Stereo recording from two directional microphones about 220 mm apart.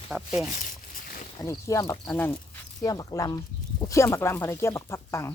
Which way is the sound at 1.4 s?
15° left (ahead or behind).